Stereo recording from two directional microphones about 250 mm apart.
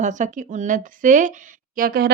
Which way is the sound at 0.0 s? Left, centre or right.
Right.